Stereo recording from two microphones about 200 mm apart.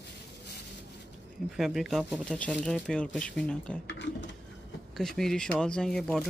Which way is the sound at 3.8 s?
65° left (ahead or behind).